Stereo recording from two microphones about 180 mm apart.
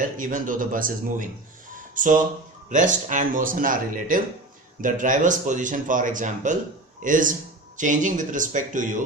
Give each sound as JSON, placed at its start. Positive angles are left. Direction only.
{"t": 0.0, "sound": "speech", "side_deg": -50}